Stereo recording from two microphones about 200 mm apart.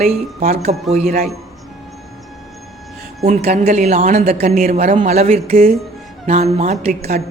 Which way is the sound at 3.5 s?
35° right (ahead or behind).